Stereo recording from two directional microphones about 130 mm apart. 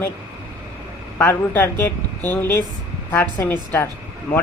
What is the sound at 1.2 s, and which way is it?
A man's voice, 15° left (ahead or behind).